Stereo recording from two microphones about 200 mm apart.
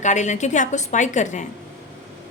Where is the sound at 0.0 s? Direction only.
35° left (ahead or behind).